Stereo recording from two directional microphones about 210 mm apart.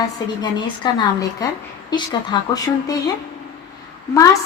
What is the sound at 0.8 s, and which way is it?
A woman's voice, 20° left (ahead or behind).